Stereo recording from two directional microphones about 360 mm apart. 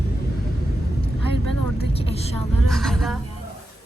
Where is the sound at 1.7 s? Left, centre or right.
Centre.